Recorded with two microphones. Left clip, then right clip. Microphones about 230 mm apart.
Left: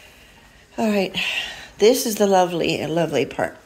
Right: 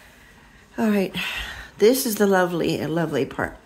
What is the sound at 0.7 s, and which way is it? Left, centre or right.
A woman's voice, centre.